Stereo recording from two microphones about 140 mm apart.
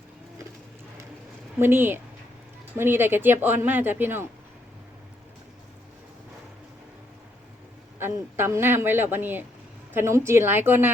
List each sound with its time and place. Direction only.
1.5 s speech: 15° right (ahead or behind)
7.9 s speech: 15° right (ahead or behind)